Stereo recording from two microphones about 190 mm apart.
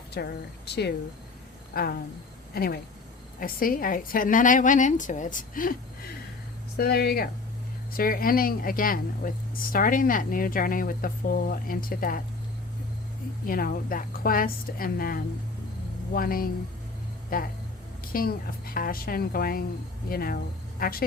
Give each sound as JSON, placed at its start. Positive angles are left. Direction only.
{"t": 0.1, "sound": "a woman's voice", "side_deg": 60}
{"t": 6.7, "sound": "a woman's voice", "side_deg": 55}
{"t": 13.4, "sound": "a woman's voice", "side_deg": 50}